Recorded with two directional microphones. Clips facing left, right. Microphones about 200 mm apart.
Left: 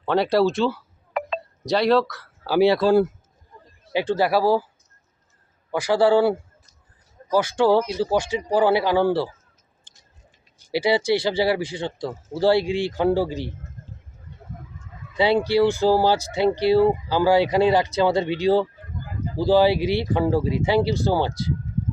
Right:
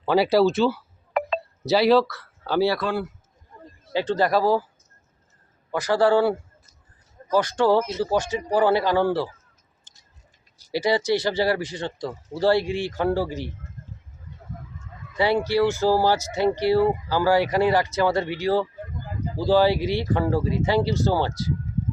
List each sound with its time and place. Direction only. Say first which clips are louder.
0.0 s speech: right 1 dB; 5° right (ahead or behind)
1.2 s telephone dialing: right 2 dB; 50° right (ahead or behind)
1.6 s speech: right 1 dB; 5° right (ahead or behind)
2.6 s speech: left 5 dB; 20° left (ahead or behind)
2.8 s speech: left 9 dB; 40° left (ahead or behind)
3.9 s speech: left 1 dB; 10° left (ahead or behind)
5.7 s speech: left 2 dB; 10° left (ahead or behind)
10.7 s speech: left 2 dB; 10° left (ahead or behind)
15.2 s speech: left 2 dB; 15° left (ahead or behind)